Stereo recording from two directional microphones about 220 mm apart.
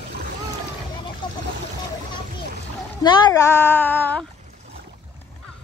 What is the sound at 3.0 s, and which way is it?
Speech, 20° left (ahead or behind).